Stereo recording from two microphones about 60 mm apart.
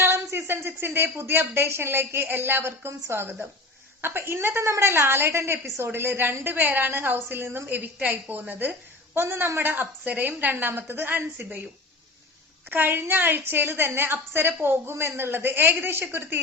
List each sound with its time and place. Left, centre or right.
0.0 s a woman's voice: right
12.7 s speech: right